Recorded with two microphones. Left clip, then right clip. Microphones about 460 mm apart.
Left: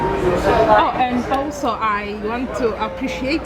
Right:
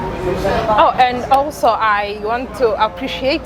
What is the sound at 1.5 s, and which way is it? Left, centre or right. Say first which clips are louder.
A woman's voice: right 6 dB; right.